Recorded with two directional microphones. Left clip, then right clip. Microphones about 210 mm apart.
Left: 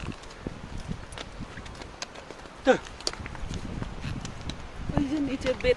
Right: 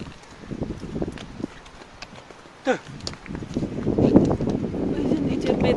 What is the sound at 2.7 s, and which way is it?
Speech, 15° right (ahead or behind).